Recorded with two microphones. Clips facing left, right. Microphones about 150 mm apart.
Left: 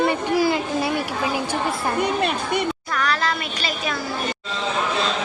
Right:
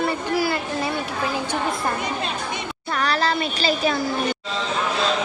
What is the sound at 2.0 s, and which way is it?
Speech, 60° left (ahead or behind).